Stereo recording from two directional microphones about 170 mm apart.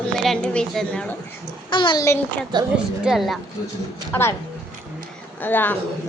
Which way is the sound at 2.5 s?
25° right (ahead or behind).